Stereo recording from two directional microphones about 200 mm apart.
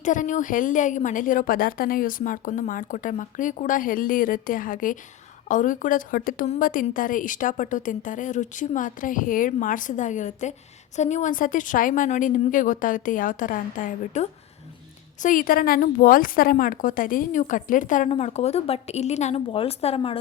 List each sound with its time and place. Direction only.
0.0 s a woman's voice: 40° left (ahead or behind)